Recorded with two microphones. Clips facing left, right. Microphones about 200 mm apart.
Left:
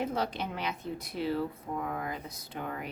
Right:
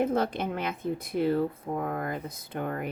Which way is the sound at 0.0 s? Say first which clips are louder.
Right 6 dB; 50° right (ahead or behind).